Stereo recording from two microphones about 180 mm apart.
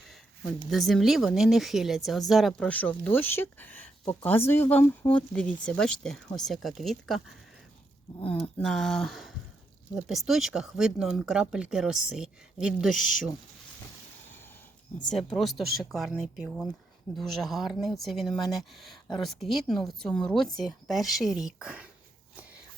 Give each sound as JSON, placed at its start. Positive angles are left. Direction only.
{"t": 0.7, "sound": "speech", "side_deg": 0}
{"t": 8.2, "sound": "speech", "side_deg": 10}
{"t": 15.0, "sound": "speech", "side_deg": 5}